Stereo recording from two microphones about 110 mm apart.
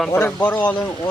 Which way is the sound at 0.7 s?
30° left (ahead or behind).